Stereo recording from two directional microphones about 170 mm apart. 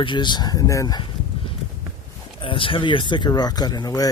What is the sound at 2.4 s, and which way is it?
Speech, 30° left (ahead or behind).